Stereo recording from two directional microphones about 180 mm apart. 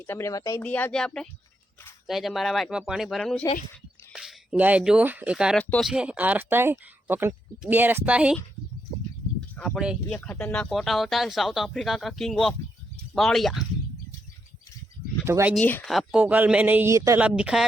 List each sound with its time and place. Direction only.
0.0 s speech: 15° left (ahead or behind)
0.6 s speech: 10° left (ahead or behind)
9.6 s speech: centre (ahead or behind)
10.1 s speech: 10° left (ahead or behind)
15.3 s speech: 15° right (ahead or behind)
15.5 s speech: 5° left (ahead or behind)
15.9 s speech: 5° right (ahead or behind)